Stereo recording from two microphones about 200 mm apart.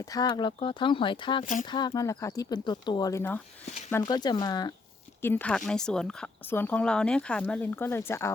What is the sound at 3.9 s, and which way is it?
Speech, 20° left (ahead or behind).